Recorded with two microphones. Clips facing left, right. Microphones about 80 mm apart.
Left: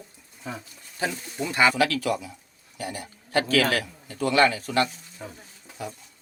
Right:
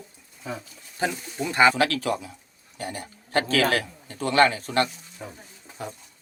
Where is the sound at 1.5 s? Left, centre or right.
Right.